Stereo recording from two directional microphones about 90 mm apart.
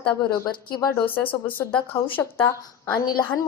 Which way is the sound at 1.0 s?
20° left (ahead or behind).